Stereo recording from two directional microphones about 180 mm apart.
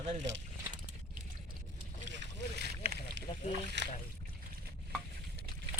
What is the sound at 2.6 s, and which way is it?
Boat, 60° right (ahead or behind).